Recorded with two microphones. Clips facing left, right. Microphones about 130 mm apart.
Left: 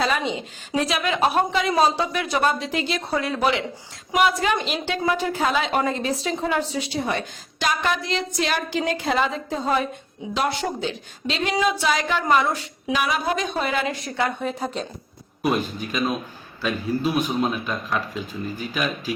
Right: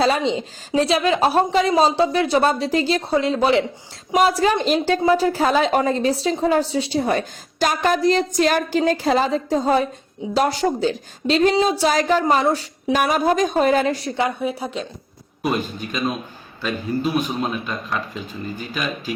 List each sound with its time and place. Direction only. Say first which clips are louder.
0.0 s a woman's voice: right 5 dB; 30° right (ahead or behind)
12.9 s a woman's voice: right 5 dB; 45° right (ahead or behind)
14.2 s a woman's voice: right 3 dB; 10° right (ahead or behind)
15.4 s speech: even; centre (ahead or behind)